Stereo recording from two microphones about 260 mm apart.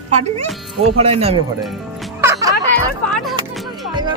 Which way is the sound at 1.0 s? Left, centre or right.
Right.